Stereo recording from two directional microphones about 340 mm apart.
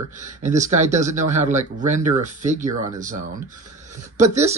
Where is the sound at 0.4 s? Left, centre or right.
Right.